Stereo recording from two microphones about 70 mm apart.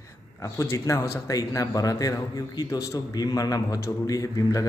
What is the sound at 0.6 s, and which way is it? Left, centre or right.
A man's voice, left.